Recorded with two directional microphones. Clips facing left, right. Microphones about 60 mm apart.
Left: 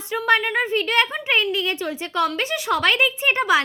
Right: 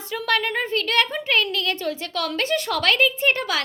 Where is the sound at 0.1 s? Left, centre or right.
Centre.